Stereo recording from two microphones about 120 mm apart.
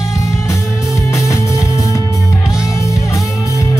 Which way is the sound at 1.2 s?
25° left (ahead or behind).